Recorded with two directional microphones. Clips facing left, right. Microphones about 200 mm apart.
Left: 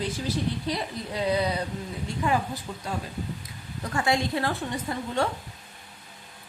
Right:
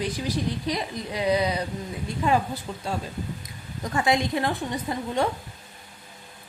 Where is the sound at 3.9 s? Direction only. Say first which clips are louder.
Right 2 dB; 20° right (ahead or behind).